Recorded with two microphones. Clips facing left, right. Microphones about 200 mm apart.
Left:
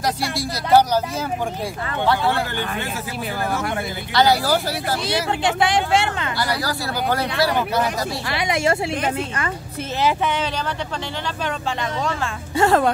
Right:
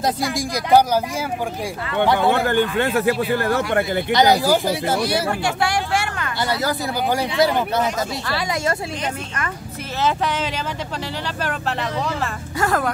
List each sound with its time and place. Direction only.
0.4 s speech: 15° right (ahead or behind)
2.0 s speech: 20° right (ahead or behind)
2.4 s speech: 50° right (ahead or behind)
2.8 s speech: 60° right (ahead or behind)
4.1 s speech: 20° right (ahead or behind)
5.0 s speech: 20° left (ahead or behind)
6.4 s speech: 15° right (ahead or behind)
8.3 s speech: 20° left (ahead or behind)
11.2 s speech: 5° right (ahead or behind)
12.5 s speech: 25° left (ahead or behind)